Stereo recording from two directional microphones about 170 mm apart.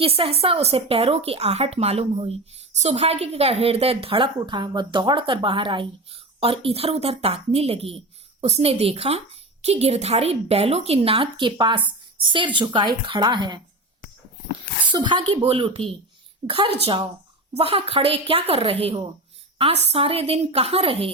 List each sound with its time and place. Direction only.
0.0 s speech: 35° right (ahead or behind)
14.9 s speech: 30° right (ahead or behind)